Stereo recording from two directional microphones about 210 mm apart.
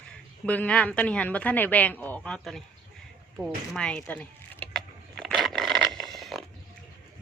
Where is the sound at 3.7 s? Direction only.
5° left (ahead or behind).